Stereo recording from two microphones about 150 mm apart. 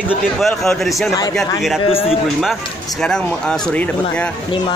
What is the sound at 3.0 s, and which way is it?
Speech, 5° left (ahead or behind).